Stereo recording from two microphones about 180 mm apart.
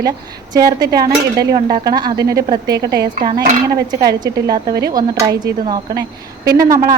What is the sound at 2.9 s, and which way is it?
Speech, 60° right (ahead or behind).